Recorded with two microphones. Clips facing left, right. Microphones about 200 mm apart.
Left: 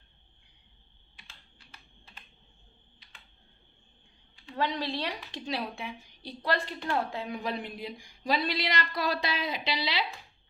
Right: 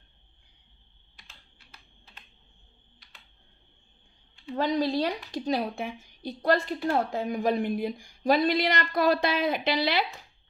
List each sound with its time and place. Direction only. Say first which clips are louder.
4.5 s speech: right 6 dB; 40° right (ahead or behind)